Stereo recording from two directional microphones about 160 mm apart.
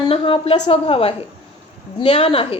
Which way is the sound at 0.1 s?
35° left (ahead or behind).